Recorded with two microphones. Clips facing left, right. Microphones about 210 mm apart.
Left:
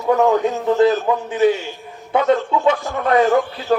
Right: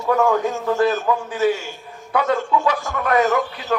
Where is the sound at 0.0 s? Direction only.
25° left (ahead or behind).